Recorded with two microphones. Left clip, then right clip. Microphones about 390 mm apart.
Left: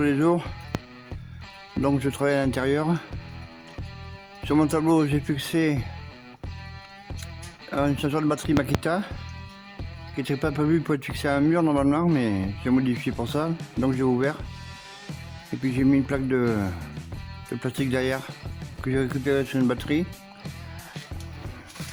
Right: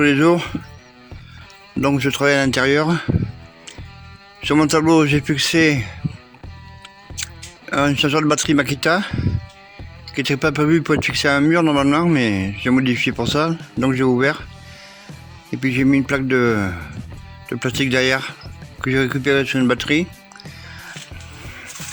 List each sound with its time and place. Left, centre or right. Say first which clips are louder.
0.0 s speech: right 8 dB; left
1.8 s speech: right 7 dB; left
4.4 s speech: right 7 dB; left
7.7 s speech: right 8 dB; left
10.2 s speech: right 8 dB; left
15.6 s speech: right 6 dB; left